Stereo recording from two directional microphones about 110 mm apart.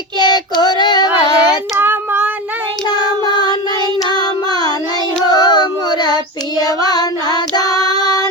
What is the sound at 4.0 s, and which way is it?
Music, 40° left (ahead or behind).